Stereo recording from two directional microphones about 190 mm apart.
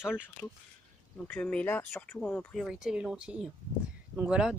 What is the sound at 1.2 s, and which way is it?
Speech, 5° left (ahead or behind).